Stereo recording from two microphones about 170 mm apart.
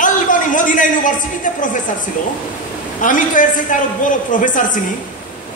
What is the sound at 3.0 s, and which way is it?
A man's voice, 50° left (ahead or behind).